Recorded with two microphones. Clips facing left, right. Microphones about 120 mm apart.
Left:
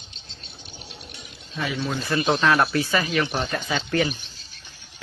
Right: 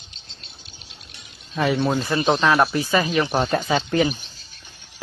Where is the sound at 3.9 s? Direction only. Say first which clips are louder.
Right 2 dB; 20° right (ahead or behind).